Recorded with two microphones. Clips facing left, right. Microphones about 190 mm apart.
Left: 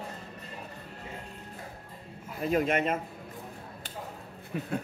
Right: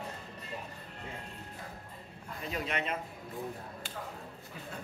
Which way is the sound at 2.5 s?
50° left (ahead or behind).